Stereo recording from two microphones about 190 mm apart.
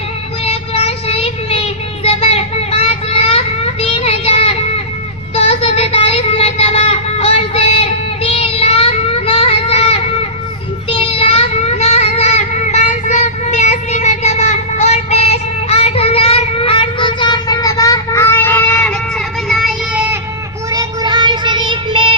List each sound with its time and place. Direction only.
0.4 s child singing: 30° left (ahead or behind); by 20.1 s 5° right (ahead or behind)
20.7 s child singing: 20° right (ahead or behind)